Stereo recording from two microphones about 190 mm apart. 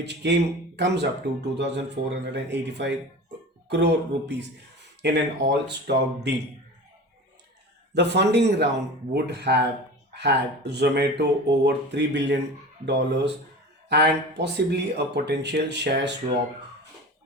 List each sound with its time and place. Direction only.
0.0 s speech: 65° right (ahead or behind)
7.9 s speech: 65° right (ahead or behind)